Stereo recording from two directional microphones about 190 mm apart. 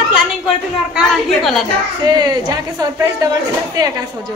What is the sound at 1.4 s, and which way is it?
Speech, centre (ahead or behind).